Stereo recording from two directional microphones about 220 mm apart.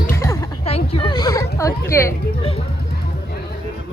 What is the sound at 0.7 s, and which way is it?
A woman's voice, 25° left (ahead or behind).